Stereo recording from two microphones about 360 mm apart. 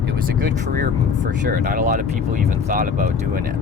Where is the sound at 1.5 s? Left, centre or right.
Right.